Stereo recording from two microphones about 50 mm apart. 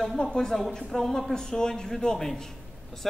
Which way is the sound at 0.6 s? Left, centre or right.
Centre.